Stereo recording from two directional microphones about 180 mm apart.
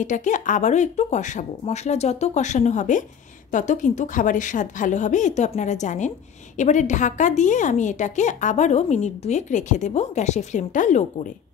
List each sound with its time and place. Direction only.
0.0 s a woman's voice: 45° left (ahead or behind)